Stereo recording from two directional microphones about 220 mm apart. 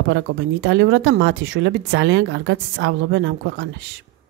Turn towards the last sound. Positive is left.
turn(degrees=-55)  # may be behind; listen again after turning